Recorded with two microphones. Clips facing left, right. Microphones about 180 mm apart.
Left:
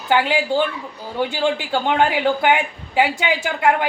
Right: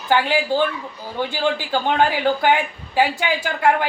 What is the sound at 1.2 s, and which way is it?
A man's voice, 20° left (ahead or behind).